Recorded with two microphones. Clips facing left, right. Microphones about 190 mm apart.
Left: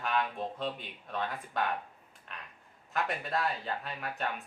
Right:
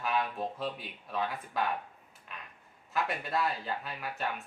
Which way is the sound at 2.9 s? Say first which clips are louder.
Right 1 dB; centre (ahead or behind).